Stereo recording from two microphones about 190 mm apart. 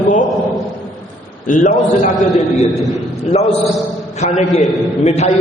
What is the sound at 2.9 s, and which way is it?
A man's voice, 35° left (ahead or behind).